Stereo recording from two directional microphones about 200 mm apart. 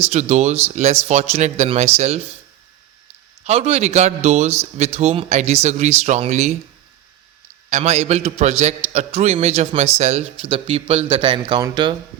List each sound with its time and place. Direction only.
0.0 s speech: 35° right (ahead or behind)
3.4 s speech: 30° right (ahead or behind)
7.7 s speech: 35° right (ahead or behind)